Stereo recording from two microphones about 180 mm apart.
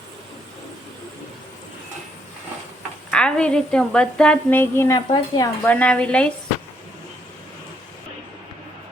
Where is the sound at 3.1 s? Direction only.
5° left (ahead or behind); by 5.5 s 20° left (ahead or behind).